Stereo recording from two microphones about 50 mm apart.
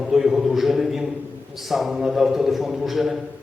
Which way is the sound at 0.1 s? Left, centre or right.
Centre.